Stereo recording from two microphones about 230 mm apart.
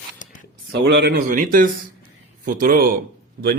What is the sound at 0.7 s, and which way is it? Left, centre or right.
A woman's voice, right.